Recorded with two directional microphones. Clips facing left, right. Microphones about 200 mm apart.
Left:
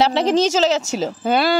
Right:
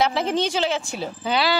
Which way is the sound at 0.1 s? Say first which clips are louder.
Left 6 dB; 85° left.